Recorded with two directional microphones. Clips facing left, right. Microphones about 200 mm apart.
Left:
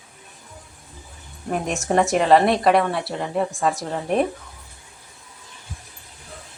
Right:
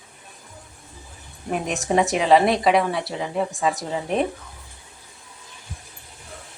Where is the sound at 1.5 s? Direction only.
Centre (ahead or behind).